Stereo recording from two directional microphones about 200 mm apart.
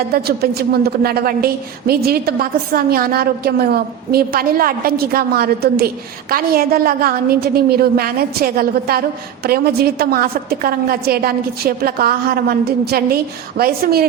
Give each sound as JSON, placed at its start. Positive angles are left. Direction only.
{"t": 0.1, "sound": "a woman's voice", "side_deg": -50}